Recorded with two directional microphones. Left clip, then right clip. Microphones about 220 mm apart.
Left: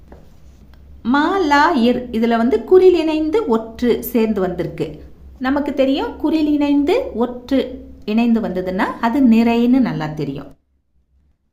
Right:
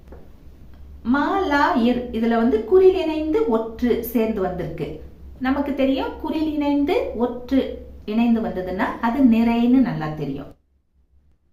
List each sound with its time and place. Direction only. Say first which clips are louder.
1.0 s a woman's voice: left 5 dB; 50° left (ahead or behind)